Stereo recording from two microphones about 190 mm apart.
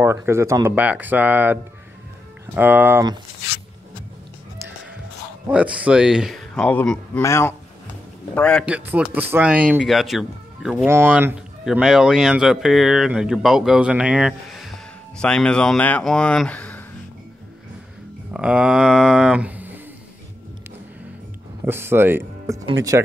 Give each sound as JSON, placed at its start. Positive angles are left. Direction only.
{"t": 0.0, "sound": "speech", "side_deg": -15}
{"t": 5.5, "sound": "speech", "side_deg": -5}
{"t": 8.6, "sound": "speech", "side_deg": -5}
{"t": 18.3, "sound": "speech", "side_deg": -5}
{"t": 21.6, "sound": "speech", "side_deg": -10}